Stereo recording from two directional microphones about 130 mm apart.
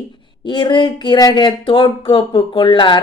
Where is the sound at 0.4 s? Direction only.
35° left (ahead or behind).